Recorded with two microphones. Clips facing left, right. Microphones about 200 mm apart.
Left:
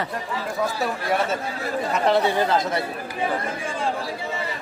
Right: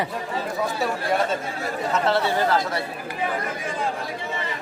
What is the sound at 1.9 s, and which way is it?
Speech, 15° left (ahead or behind).